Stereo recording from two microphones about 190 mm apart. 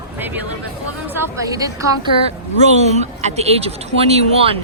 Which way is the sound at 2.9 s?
35° right (ahead or behind).